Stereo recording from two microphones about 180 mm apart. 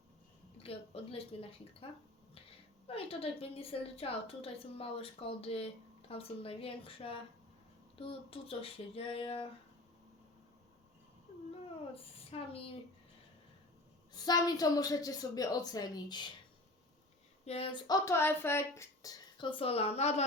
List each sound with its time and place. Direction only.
0.6 s a woman's voice: 30° left (ahead or behind)
12.3 s a woman's voice: 30° left (ahead or behind)
14.1 s speech: 20° left (ahead or behind)
17.4 s speech: 35° left (ahead or behind)